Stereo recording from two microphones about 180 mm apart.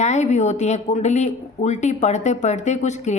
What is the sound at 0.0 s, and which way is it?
A woman's voice, 40° left (ahead or behind).